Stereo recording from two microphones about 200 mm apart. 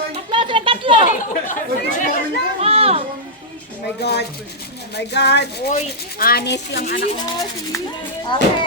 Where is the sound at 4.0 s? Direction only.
55° left (ahead or behind).